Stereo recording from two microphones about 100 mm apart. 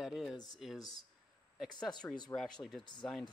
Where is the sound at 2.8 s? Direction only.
50° left (ahead or behind).